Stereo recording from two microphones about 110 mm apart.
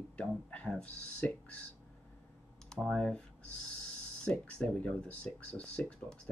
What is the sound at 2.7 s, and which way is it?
Speech, 5° left (ahead or behind).